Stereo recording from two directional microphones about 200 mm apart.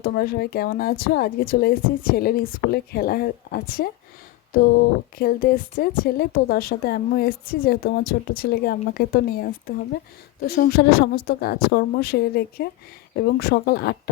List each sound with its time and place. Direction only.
0.0 s a woman's voice: 50° left (ahead or behind)